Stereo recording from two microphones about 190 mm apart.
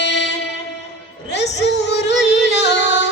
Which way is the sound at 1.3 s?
65° left (ahead or behind).